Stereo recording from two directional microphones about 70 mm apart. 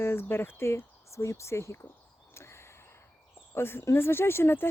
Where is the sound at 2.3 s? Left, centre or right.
Left.